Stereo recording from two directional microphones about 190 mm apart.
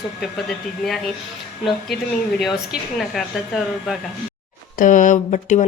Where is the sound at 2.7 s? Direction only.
Centre (ahead or behind).